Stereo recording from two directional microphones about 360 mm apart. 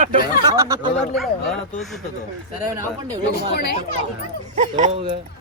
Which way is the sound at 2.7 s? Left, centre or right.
Centre.